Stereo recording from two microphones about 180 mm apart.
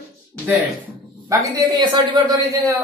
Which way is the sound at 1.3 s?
20° right (ahead or behind).